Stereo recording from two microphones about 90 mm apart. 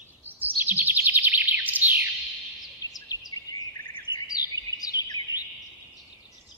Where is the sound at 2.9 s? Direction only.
45° left (ahead or behind).